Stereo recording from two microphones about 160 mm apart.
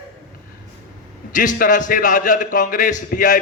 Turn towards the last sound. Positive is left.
turn(degrees=55)  # may be behind; listen again after turning